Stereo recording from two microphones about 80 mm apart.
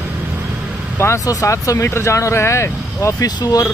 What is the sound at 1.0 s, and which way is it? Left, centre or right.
Speech, left.